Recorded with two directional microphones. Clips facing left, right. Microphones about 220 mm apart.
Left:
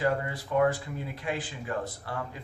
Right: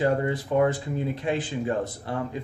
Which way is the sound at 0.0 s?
25° right (ahead or behind).